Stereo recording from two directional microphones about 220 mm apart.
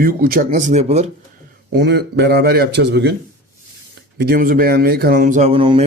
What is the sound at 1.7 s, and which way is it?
A man's voice, 50° right (ahead or behind).